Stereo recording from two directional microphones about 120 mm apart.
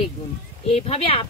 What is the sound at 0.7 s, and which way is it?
Speech, 55° left (ahead or behind).